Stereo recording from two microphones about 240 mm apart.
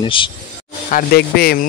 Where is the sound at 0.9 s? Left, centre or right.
Left.